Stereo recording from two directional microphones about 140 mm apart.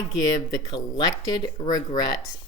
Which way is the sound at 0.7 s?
30° left (ahead or behind).